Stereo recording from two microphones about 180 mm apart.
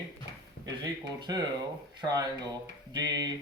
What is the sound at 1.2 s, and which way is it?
Speech, 25° right (ahead or behind).